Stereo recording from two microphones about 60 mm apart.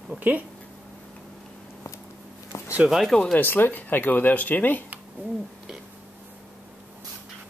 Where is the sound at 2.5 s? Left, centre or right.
Left.